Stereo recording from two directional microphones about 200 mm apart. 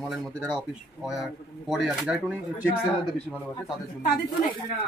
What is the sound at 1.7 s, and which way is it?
Speech, centre (ahead or behind).